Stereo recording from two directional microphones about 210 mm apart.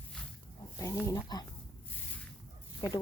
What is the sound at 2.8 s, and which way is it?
Speech, 25° left (ahead or behind).